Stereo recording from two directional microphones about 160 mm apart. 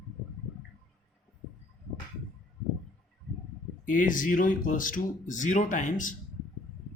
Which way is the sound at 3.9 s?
55° left (ahead or behind).